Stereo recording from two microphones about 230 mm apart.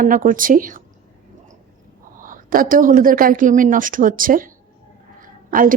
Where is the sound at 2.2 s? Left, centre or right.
Right.